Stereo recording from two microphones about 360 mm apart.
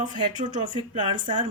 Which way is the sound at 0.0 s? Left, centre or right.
Centre.